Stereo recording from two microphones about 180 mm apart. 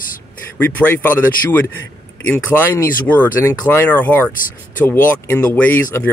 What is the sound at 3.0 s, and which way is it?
Speech, 10° left (ahead or behind).